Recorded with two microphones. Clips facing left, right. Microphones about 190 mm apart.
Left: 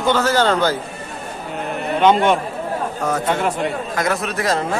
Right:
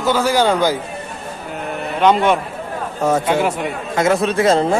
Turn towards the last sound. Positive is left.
turn(degrees=-25)  # may be behind; listen again after turning